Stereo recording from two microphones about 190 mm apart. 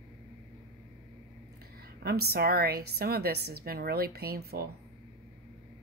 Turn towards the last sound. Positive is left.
turn(degrees=-55)  # may be behind; listen again after turning